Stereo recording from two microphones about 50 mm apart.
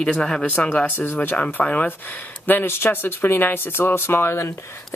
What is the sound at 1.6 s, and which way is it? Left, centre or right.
Speech, left.